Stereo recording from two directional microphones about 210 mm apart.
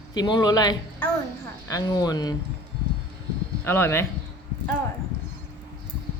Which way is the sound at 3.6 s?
10° left (ahead or behind).